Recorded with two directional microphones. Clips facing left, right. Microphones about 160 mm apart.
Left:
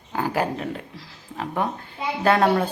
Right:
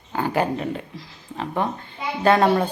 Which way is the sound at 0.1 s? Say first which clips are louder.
Right 2 dB; centre (ahead or behind).